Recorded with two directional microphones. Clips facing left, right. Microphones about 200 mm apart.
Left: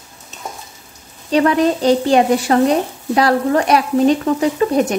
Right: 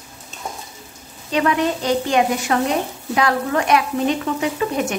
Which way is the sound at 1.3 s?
35° left (ahead or behind).